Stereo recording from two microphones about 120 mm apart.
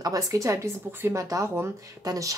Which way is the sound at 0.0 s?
30° right (ahead or behind).